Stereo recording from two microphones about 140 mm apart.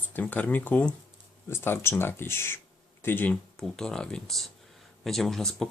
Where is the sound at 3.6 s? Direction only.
5° left (ahead or behind).